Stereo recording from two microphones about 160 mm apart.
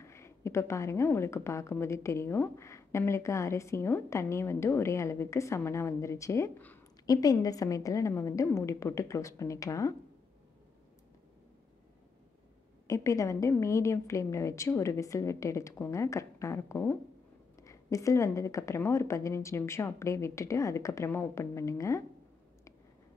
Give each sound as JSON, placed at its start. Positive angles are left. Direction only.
{"t": 0.0, "sound": "a woman's voice", "side_deg": 15}
{"t": 12.8, "sound": "a woman's voice", "side_deg": 20}